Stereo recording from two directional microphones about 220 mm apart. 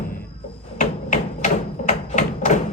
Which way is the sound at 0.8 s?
35° left (ahead or behind).